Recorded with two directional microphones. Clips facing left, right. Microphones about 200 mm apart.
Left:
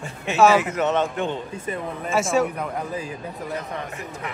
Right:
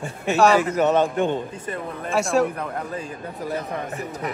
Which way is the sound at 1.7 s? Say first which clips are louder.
Left 4 dB; centre (ahead or behind).